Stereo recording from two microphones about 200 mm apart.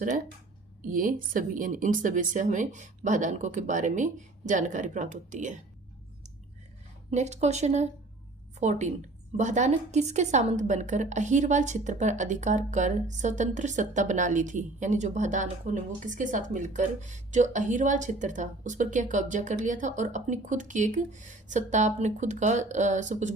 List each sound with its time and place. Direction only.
0.8 s a woman's voice: 40° right (ahead or behind)
7.1 s a woman's voice: 35° right (ahead or behind)